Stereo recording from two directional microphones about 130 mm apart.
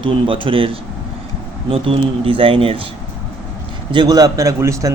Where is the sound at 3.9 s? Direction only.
30° right (ahead or behind).